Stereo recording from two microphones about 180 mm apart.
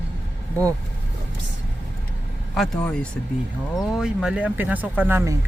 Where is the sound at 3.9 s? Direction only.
5° right (ahead or behind).